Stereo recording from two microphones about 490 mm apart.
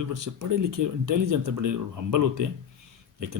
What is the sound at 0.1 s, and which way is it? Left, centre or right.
Speech, right.